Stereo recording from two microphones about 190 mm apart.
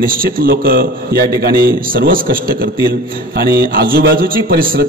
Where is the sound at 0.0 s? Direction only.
50° right (ahead or behind).